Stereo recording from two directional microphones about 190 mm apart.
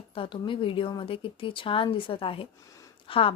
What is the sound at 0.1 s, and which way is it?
A woman's voice, 25° left (ahead or behind).